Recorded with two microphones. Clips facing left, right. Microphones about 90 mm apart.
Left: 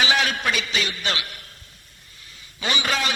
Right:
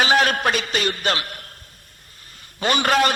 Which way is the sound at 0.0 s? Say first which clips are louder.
Right 4 dB; 45° right (ahead or behind).